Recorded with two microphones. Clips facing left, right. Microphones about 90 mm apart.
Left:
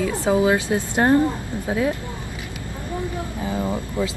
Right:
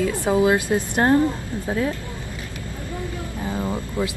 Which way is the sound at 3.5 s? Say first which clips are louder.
Left 1 dB; 10° left (ahead or behind).